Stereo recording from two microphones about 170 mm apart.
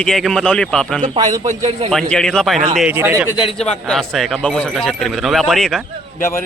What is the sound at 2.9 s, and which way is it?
Speech, 15° right (ahead or behind).